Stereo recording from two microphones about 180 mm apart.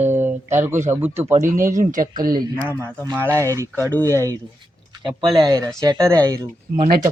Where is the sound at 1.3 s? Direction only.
45° right (ahead or behind).